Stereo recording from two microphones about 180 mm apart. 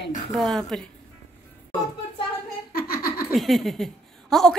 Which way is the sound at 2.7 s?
55° left (ahead or behind).